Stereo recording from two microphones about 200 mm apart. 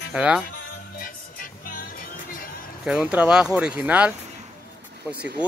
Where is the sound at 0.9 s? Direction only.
45° left (ahead or behind).